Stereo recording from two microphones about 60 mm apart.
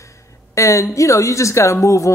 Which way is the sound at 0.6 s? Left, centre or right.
Left.